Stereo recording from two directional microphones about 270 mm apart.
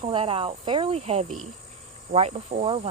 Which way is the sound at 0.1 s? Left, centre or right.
Centre.